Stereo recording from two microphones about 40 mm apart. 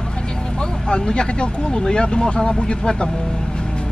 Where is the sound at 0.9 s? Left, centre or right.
Left.